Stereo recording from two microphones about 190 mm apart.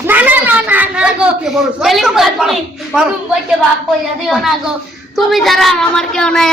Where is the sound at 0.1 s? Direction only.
10° right (ahead or behind).